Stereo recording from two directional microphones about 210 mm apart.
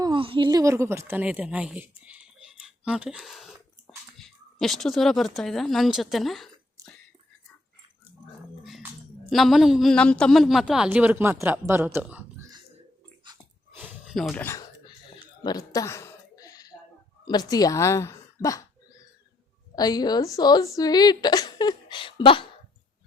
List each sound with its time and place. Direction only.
0.0 s a man's voice: 25° right (ahead or behind); by 6.5 s centre (ahead or behind)
8.6 s dog: 5° right (ahead or behind)
9.3 s a man's voice: centre (ahead or behind)
13.7 s a sound: 5° right (ahead or behind)
14.8 s a sound: 20° left (ahead or behind)
17.2 s a woman's voice: 20° left (ahead or behind)
19.7 s speech: 20° left (ahead or behind)